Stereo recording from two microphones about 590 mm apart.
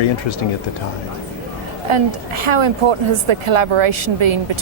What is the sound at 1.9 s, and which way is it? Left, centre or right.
A woman's voice, right.